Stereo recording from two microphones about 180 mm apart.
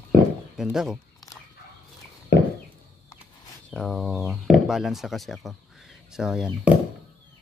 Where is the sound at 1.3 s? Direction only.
20° left (ahead or behind).